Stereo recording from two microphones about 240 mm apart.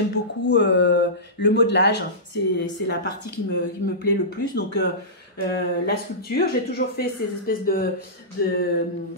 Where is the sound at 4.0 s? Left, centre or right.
Left.